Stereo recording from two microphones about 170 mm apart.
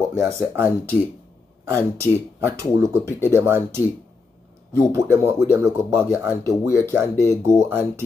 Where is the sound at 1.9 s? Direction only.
15° right (ahead or behind).